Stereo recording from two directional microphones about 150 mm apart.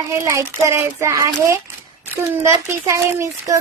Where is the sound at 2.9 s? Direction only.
20° right (ahead or behind).